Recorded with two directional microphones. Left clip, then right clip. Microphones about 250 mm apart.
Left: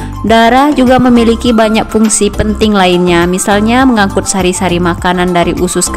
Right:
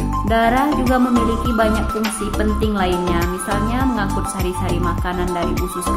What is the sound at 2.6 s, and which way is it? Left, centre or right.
A woman's voice, left.